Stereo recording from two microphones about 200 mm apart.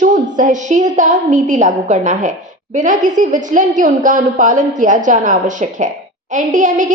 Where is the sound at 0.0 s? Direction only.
40° right (ahead or behind).